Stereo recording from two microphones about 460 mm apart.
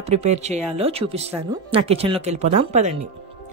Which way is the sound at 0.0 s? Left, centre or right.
Centre.